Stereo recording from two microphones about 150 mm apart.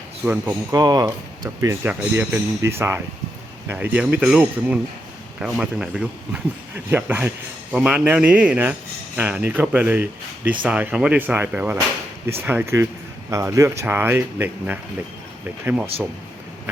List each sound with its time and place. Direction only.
0.2 s speech: 10° right (ahead or behind)
0.7 s speech: 25° right (ahead or behind); by 15.9 s 10° right (ahead or behind)